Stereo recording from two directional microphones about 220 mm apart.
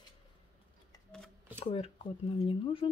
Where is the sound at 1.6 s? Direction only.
25° left (ahead or behind).